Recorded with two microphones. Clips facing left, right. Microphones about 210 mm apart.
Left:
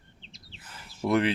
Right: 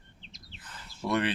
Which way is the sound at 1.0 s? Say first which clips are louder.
Left 5 dB; 25° left (ahead or behind).